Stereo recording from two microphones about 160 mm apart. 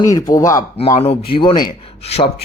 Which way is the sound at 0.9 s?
35° left (ahead or behind).